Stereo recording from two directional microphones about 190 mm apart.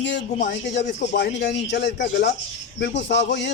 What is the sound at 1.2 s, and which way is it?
Speech, 65° left (ahead or behind).